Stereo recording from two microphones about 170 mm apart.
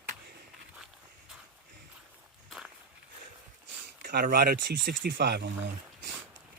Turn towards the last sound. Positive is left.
turn(degrees=-70)  # may be behind; listen again after turning